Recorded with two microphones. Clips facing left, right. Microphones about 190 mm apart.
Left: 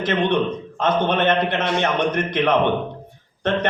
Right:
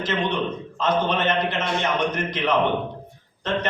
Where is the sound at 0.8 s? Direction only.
55° left (ahead or behind).